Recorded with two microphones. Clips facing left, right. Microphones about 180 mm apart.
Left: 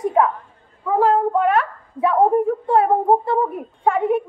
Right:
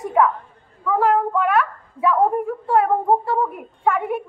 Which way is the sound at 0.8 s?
25° left (ahead or behind).